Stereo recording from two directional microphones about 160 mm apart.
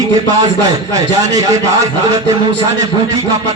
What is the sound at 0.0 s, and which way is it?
Speech, 20° right (ahead or behind).